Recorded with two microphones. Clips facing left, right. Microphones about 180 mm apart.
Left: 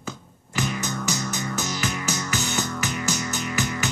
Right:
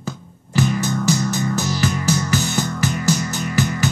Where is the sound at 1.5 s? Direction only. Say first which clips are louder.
Right 7 dB; 35° right (ahead or behind).